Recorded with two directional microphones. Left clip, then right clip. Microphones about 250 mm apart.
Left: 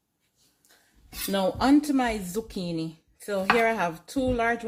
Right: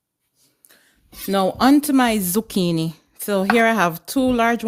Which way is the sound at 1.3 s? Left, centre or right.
Right.